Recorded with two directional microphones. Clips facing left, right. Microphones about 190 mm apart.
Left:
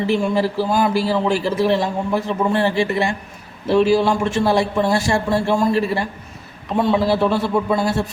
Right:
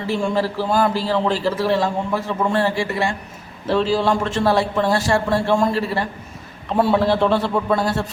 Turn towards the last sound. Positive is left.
turn(degrees=10)  # may be behind; listen again after turning